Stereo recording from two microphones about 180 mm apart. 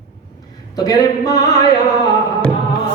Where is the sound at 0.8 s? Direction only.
20° left (ahead or behind).